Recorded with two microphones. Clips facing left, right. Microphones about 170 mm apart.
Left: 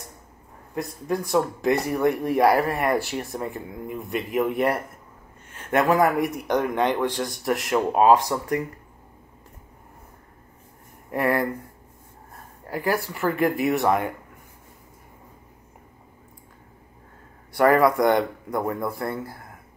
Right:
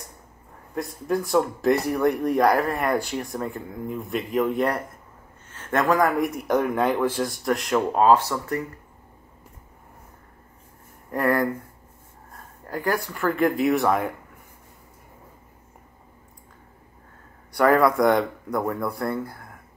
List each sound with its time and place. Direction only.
0.7 s speech: centre (ahead or behind)
7.9 s speech: 15° left (ahead or behind)
11.1 s speech: 10° left (ahead or behind)
12.6 s speech: 10° left (ahead or behind)
17.6 s speech: centre (ahead or behind)